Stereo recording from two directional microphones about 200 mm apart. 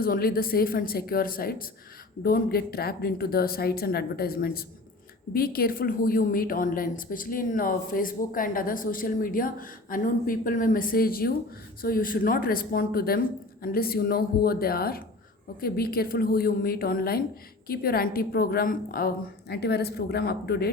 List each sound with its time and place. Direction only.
0.0 s a woman's voice: 45° left (ahead or behind)